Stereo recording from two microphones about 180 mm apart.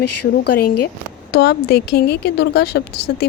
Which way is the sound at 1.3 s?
60° left (ahead or behind).